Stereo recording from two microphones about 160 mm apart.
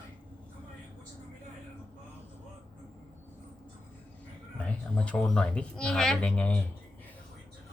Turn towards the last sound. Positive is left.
turn(degrees=5)  # may be behind; listen again after turning